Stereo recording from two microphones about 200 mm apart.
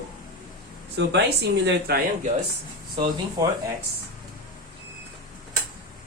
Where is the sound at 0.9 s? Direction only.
60° right (ahead or behind).